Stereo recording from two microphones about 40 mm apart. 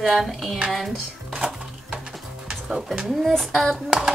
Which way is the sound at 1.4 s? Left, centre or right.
Centre.